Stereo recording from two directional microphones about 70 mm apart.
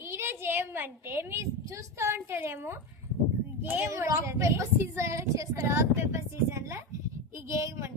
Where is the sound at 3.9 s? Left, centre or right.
Right.